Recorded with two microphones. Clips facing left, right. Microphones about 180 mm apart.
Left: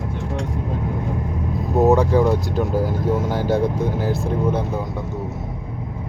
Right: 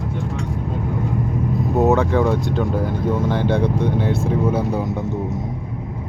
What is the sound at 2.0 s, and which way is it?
Speech, centre (ahead or behind).